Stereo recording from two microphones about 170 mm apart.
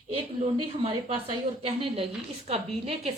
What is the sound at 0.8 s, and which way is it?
A woman's voice, 30° right (ahead or behind).